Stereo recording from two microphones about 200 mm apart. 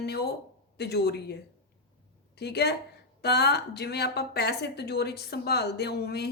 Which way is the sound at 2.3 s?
55° left (ahead or behind).